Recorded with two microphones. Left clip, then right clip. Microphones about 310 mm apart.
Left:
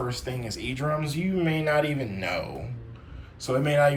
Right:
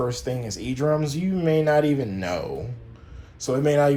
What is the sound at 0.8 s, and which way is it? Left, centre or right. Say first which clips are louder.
Speech: right 6 dB; centre.